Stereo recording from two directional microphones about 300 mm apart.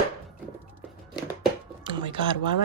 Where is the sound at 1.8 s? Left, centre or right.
Centre.